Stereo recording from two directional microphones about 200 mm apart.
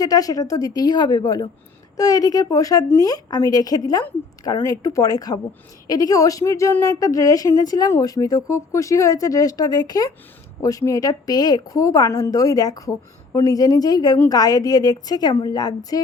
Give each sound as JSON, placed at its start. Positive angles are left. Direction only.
{"t": 0.0, "sound": "a woman's voice", "side_deg": 20}